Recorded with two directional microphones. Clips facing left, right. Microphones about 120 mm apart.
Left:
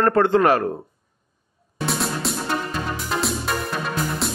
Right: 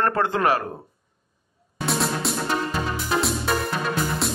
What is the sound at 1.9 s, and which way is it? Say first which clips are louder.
Music: right 1 dB; centre (ahead or behind).